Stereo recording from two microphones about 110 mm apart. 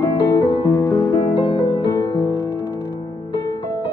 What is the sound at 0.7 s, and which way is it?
Music, 25° left (ahead or behind).